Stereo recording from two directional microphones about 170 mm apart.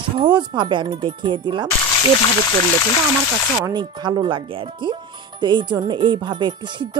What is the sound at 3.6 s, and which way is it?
Speech, 25° right (ahead or behind).